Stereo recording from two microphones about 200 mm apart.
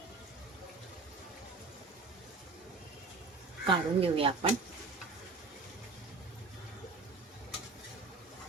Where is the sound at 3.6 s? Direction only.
25° right (ahead or behind).